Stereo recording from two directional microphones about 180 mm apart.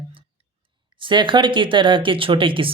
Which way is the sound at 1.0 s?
25° right (ahead or behind).